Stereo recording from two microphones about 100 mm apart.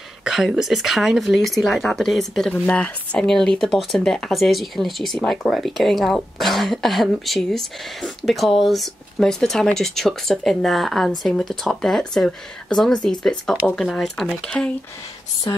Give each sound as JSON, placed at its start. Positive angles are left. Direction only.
{"t": 0.2, "sound": "speech", "side_deg": -5}
{"t": 15.5, "sound": "speech", "side_deg": 45}